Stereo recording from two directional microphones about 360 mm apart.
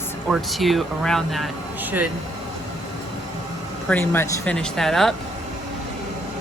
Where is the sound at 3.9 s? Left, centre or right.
Centre.